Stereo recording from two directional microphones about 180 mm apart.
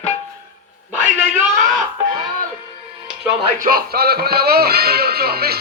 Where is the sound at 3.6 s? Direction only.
55° right (ahead or behind).